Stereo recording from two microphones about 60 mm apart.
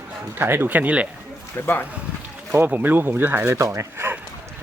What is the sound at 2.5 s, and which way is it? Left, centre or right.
Speech, right.